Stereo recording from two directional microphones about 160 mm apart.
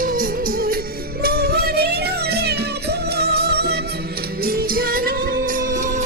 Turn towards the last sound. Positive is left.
turn(degrees=-55)  # may be behind; listen again after turning